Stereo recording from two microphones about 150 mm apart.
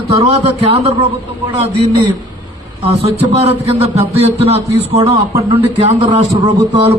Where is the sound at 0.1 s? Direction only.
40° right (ahead or behind).